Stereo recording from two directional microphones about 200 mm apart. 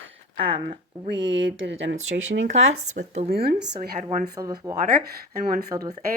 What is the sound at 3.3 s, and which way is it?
Speech, 50° right (ahead or behind).